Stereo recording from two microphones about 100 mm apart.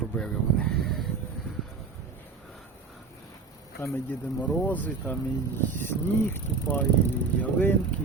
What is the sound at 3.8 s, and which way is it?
Speech, 20° left (ahead or behind).